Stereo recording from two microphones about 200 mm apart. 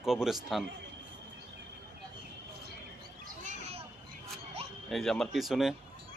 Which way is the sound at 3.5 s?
30° right (ahead or behind).